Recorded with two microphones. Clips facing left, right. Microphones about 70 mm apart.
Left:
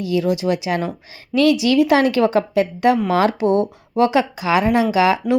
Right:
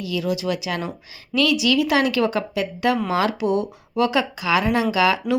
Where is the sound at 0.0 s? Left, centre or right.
Left.